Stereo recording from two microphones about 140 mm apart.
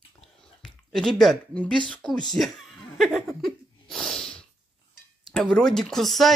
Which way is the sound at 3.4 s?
5° left (ahead or behind).